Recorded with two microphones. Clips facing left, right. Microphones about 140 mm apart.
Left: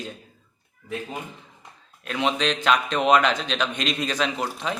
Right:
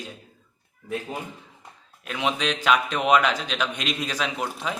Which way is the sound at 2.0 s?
5° right (ahead or behind).